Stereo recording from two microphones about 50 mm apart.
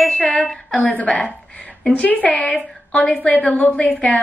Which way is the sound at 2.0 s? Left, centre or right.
Left.